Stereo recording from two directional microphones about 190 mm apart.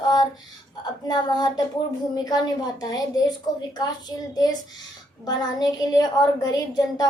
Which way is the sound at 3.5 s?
20° left (ahead or behind).